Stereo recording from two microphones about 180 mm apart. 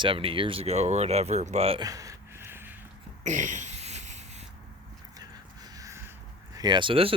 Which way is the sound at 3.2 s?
45° right (ahead or behind).